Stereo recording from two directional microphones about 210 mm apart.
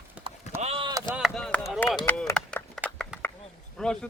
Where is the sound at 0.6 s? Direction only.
25° right (ahead or behind).